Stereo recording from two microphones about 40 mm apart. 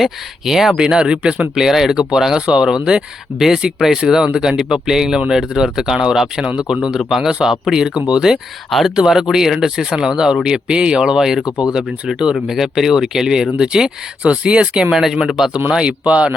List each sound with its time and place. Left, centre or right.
0.0 s speech: centre
0.8 s speech: centre
1.5 s speech: centre
14.2 s speech: right
14.9 s speech: centre
15.7 s speech: right